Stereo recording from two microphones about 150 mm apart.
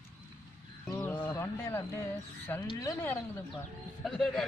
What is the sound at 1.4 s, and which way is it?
Speech, 15° left (ahead or behind).